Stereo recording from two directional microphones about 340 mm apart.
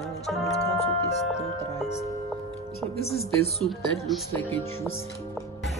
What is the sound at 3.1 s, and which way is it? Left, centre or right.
Speech, centre.